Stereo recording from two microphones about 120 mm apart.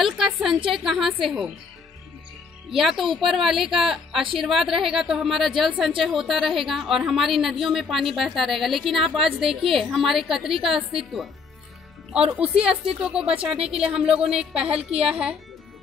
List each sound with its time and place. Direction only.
0.0 s a woman's voice: centre (ahead or behind)
2.7 s a woman's voice: centre (ahead or behind)
12.6 s a woman's voice: 5° right (ahead or behind)
14.7 s a woman's voice: 55° right (ahead or behind)
15.0 s a woman's voice: 5° right (ahead or behind)